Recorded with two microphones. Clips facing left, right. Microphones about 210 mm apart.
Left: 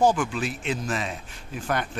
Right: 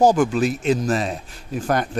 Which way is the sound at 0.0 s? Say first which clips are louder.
Right 6 dB; 40° right (ahead or behind).